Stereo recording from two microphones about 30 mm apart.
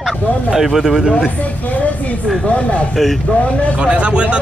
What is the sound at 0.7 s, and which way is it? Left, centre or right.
Speech, centre.